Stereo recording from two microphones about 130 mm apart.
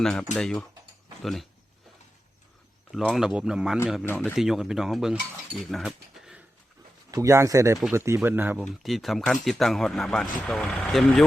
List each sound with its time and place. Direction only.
0.0 s speech: 5° left (ahead or behind)
2.9 s speech: centre (ahead or behind)
5.7 s cutlery: 5° right (ahead or behind)
7.1 s speech: 25° right (ahead or behind)
8.6 s speech: centre (ahead or behind)